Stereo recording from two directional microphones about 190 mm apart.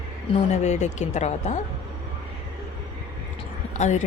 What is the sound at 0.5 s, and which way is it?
A woman's voice, 35° left (ahead or behind).